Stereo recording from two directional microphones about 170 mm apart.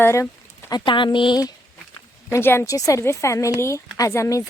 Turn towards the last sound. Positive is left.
turn(degrees=20)  # may be behind; listen again after turning